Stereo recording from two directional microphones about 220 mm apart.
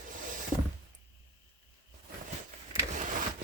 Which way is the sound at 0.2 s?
35° right (ahead or behind).